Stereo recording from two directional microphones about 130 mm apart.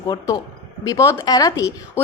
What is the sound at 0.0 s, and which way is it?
A woman's voice, 30° left (ahead or behind).